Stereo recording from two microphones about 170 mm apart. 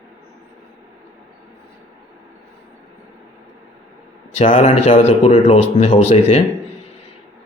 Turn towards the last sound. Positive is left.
turn(degrees=35)  # may be behind; listen again after turning